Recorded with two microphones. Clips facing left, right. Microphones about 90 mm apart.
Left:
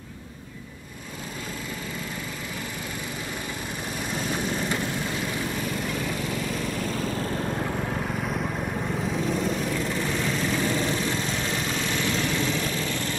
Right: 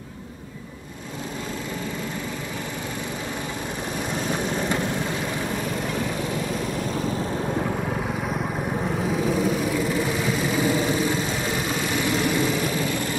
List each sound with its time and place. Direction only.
4.1 s vehicle: 25° right (ahead or behind)
5.7 s lawn mower: 5° right (ahead or behind)